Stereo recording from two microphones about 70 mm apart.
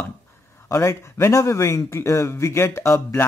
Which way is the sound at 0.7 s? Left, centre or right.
Left.